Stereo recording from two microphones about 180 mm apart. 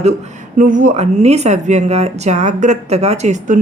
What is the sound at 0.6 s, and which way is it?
Speech, 45° right (ahead or behind).